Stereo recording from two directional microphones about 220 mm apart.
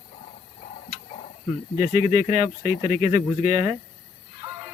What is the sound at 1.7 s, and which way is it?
Speech, 35° left (ahead or behind).